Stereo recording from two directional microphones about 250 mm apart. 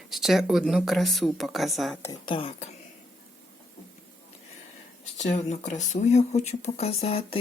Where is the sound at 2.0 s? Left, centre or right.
Centre.